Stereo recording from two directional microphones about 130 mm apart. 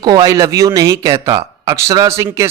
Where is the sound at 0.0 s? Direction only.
30° right (ahead or behind).